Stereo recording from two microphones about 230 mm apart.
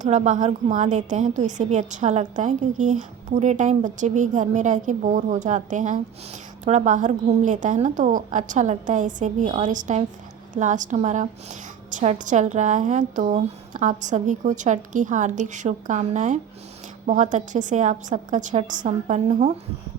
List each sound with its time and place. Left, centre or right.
0.0 s a woman's voice: right